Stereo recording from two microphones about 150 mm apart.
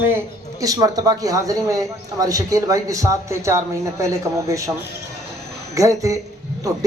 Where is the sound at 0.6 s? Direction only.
25° right (ahead or behind).